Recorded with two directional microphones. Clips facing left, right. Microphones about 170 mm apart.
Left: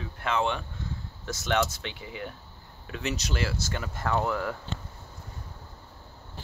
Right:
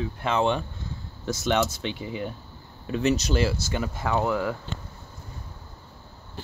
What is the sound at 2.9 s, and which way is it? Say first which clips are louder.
Speech: right 9 dB; 40° right (ahead or behind).